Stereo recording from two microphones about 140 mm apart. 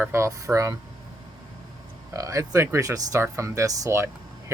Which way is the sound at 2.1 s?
25° right (ahead or behind).